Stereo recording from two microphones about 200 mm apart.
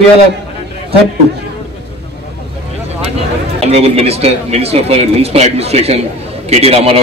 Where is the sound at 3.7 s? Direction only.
30° right (ahead or behind).